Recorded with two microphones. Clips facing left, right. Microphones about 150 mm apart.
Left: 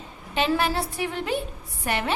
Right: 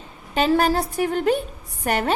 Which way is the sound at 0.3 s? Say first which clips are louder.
Right 5 dB; 40° right (ahead or behind).